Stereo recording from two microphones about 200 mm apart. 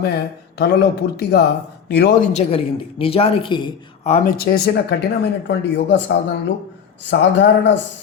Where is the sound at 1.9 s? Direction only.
55° left (ahead or behind).